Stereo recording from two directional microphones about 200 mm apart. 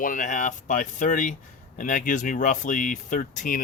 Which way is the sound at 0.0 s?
40° left (ahead or behind).